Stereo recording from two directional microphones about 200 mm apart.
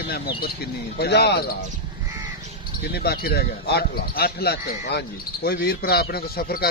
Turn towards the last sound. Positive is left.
turn(degrees=50)  # may be behind; listen again after turning